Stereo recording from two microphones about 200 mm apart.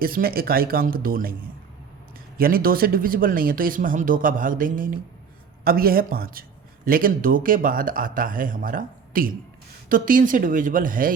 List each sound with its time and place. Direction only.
0.0 s speech: 45° right (ahead or behind)
2.4 s speech: 45° right (ahead or behind)